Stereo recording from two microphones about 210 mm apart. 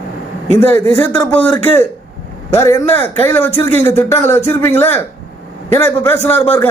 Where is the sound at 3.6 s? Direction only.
30° right (ahead or behind).